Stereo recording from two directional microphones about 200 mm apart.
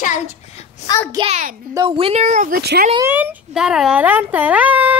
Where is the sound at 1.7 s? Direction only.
25° right (ahead or behind); by 2.6 s 40° right (ahead or behind).